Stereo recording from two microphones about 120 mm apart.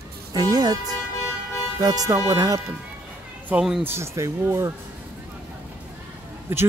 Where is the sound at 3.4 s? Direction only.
5° right (ahead or behind).